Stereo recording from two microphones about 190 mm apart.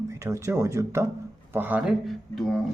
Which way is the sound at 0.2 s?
15° right (ahead or behind).